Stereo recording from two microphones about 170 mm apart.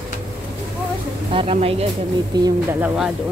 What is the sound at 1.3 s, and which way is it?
Speech, 35° right (ahead or behind).